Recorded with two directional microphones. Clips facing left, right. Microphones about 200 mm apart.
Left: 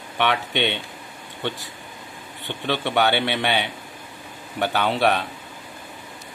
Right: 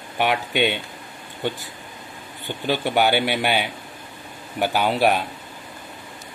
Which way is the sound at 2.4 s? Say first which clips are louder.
Right 2 dB; 5° right (ahead or behind).